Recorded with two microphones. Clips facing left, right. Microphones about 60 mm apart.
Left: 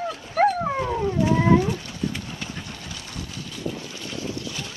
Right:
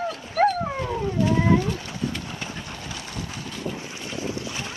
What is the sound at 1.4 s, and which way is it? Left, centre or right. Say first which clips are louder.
Cat: left 3 dB; left.